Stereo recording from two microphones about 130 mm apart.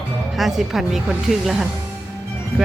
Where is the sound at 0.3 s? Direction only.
Centre (ahead or behind).